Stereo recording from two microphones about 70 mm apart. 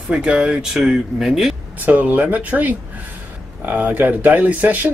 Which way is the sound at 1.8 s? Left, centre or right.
Right.